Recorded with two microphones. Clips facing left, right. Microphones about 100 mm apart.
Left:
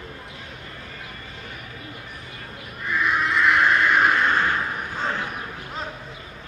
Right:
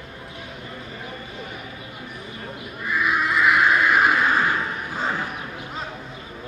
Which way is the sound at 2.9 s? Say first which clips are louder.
Even; 5° right (ahead or behind).